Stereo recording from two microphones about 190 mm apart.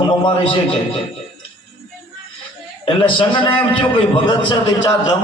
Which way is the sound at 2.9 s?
25° left (ahead or behind).